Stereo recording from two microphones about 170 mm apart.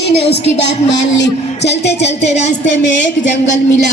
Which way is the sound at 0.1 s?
75° left (ahead or behind).